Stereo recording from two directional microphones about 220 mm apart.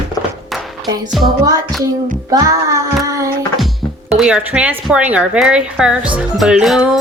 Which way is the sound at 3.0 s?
15° right (ahead or behind).